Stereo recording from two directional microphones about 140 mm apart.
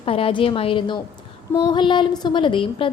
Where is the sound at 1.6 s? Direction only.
35° left (ahead or behind).